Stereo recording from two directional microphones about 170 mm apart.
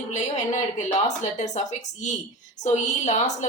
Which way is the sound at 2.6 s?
45° left (ahead or behind).